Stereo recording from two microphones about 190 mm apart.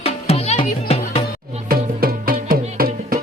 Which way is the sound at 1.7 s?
50° right (ahead or behind).